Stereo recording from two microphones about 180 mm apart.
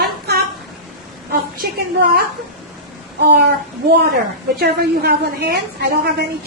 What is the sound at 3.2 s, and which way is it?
Speech, 70° right (ahead or behind).